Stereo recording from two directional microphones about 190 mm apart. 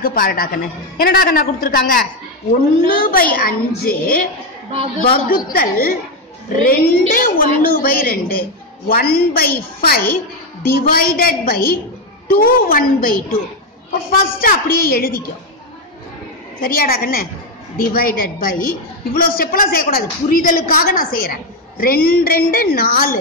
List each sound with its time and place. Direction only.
0.0 s a woman's voice: 50° left (ahead or behind)
5.3 s a woman's voice: 50° left (ahead or behind)
16.6 s a woman's voice: 50° left (ahead or behind)